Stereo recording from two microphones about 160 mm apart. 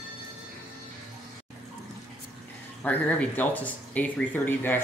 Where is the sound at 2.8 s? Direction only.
10° left (ahead or behind).